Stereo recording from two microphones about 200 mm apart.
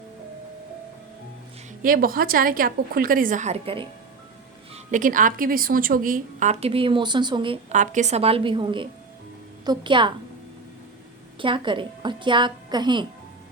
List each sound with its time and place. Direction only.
1.8 s a woman's voice: 45° right (ahead or behind); by 10.1 s 25° right (ahead or behind)
11.3 s a woman's voice: 25° right (ahead or behind)